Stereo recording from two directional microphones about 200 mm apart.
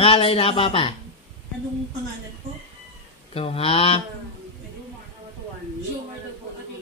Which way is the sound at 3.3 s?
30° left (ahead or behind).